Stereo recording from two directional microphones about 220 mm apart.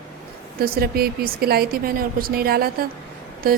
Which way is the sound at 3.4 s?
40° right (ahead or behind).